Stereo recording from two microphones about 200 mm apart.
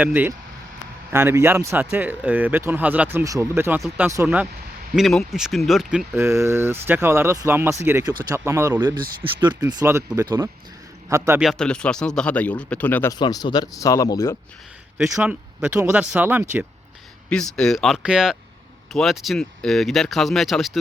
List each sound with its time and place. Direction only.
0.0 s speech: 10° right (ahead or behind)
6.1 s speech: 15° right (ahead or behind)
11.4 s speech: 5° left (ahead or behind)
13.1 s speech: 20° left (ahead or behind)
14.9 s speech: 10° right (ahead or behind)
17.2 s speech: 5° left (ahead or behind)